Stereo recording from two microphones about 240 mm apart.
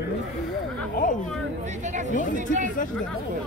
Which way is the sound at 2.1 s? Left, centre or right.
Left.